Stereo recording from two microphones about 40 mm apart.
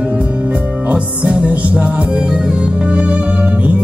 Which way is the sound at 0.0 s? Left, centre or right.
Right.